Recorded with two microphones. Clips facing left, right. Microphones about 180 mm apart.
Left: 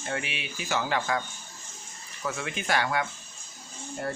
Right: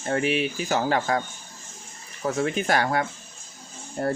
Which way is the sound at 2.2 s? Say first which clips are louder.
Right 7 dB; 40° right (ahead or behind).